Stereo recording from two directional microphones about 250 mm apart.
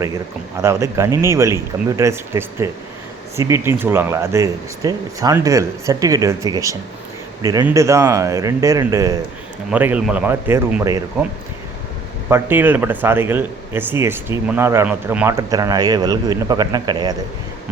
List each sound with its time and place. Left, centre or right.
0.0 s speech: centre
12.3 s speech: centre